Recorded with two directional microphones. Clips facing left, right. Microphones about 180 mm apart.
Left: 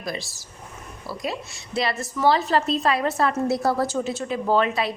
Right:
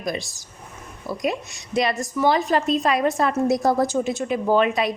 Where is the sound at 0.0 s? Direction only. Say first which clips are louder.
Right 4 dB; 20° right (ahead or behind).